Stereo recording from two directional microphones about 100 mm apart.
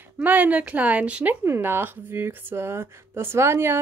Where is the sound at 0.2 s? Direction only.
15° right (ahead or behind).